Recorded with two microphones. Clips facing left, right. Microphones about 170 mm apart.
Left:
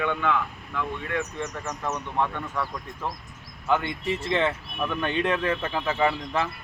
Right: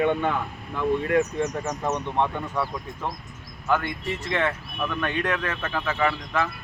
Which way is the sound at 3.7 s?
25° left (ahead or behind).